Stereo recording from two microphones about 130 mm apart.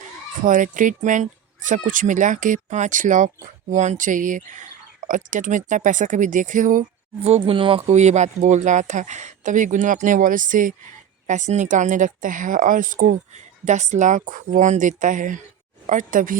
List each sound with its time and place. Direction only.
0.4 s speech: 85° right
7.2 s speech: 55° right (ahead or behind); by 10.8 s 90° right
11.3 s speech: 70° right (ahead or behind); by 16.4 s 90° right